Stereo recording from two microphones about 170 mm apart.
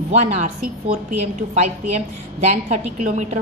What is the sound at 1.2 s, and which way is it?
A woman's voice, 40° right (ahead or behind).